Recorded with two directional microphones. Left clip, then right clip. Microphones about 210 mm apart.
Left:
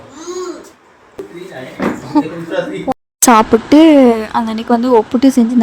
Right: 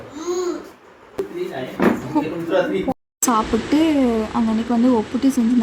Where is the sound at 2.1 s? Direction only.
35° left (ahead or behind).